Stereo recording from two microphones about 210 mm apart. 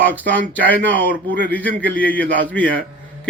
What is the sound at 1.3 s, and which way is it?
Speech, 10° left (ahead or behind).